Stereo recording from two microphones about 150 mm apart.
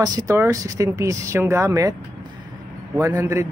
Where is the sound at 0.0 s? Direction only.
20° right (ahead or behind).